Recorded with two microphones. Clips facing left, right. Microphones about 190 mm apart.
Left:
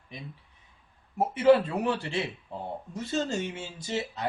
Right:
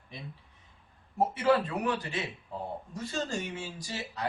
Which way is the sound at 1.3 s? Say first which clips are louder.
Left 7 dB; 25° left (ahead or behind).